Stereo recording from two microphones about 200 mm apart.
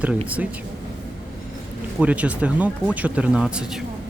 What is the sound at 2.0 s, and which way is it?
Speech, 5° right (ahead or behind).